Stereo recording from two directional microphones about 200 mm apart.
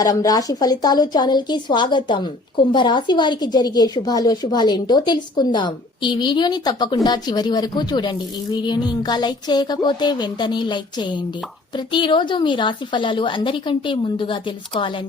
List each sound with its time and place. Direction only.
0.0 s a woman's voice: 20° left (ahead or behind)